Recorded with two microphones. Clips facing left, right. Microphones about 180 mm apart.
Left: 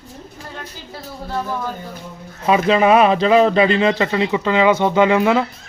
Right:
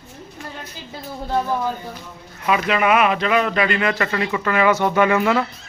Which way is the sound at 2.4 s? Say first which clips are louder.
Left 5 dB; 30° left (ahead or behind).